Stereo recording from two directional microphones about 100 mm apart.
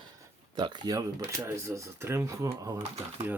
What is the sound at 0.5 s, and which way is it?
Speech, 45° right (ahead or behind).